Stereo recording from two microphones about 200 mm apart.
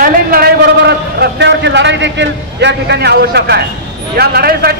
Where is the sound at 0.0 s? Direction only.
50° right (ahead or behind).